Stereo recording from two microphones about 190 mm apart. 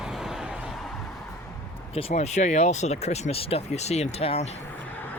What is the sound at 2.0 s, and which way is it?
Speech, 35° left (ahead or behind).